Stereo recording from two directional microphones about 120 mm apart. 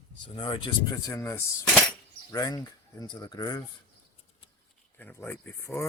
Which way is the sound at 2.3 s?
30° left (ahead or behind).